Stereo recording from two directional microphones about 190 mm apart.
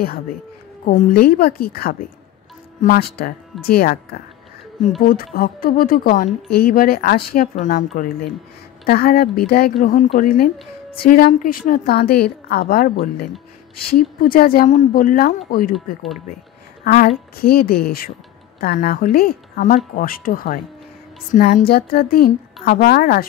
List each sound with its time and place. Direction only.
0.8 s a woman's voice: 55° left (ahead or behind)
7.5 s a woman's voice: 40° left (ahead or behind)
15.7 s speech: centre (ahead or behind)
16.8 s a woman's voice: 50° left (ahead or behind)